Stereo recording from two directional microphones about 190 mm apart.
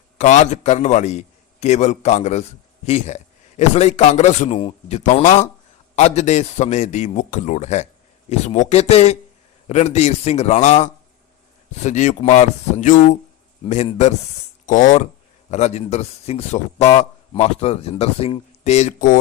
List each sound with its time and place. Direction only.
0.2 s speech: 40° left (ahead or behind)
14.7 s speech: 40° left (ahead or behind)